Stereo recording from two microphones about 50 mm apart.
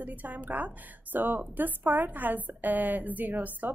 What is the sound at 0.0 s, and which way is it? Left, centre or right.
A woman's voice, right.